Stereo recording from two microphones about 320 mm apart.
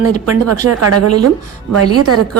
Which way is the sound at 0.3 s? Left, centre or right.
Right.